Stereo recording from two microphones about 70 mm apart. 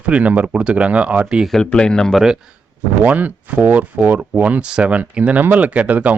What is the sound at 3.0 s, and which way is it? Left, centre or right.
Speech, right.